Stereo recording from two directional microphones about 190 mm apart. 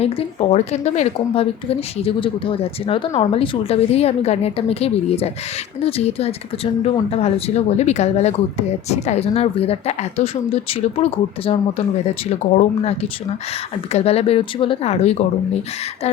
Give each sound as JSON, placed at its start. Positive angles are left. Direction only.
{"t": 0.0, "sound": "speech", "side_deg": 35}